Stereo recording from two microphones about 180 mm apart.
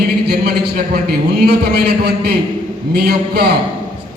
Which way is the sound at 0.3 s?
65° right (ahead or behind).